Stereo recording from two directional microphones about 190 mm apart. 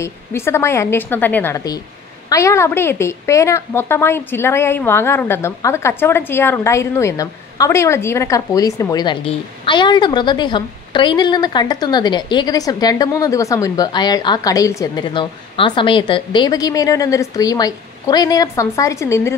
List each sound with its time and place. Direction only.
0.0 s a woman's voice: 15° left (ahead or behind)